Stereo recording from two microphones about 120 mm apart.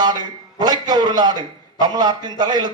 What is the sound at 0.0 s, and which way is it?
A man's voice, 35° right (ahead or behind).